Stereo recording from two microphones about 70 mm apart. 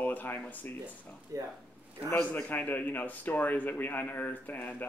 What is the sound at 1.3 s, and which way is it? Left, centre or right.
Speech, right.